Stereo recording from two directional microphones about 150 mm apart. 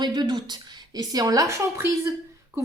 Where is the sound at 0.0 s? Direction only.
30° right (ahead or behind).